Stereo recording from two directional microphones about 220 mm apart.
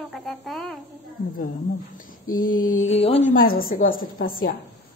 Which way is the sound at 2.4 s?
40° left (ahead or behind).